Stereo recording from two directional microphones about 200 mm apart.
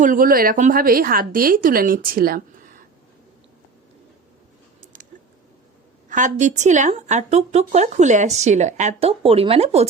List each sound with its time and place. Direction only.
0.0 s speech: 45° right (ahead or behind)
4.8 s a sound: 40° right (ahead or behind)
6.1 s a woman's voice: 40° right (ahead or behind)